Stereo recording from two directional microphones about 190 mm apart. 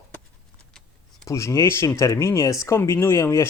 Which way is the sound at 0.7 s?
5° left (ahead or behind).